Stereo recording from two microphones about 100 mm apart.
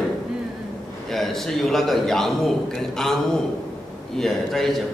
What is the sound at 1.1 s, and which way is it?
A man's voice, 5° left (ahead or behind).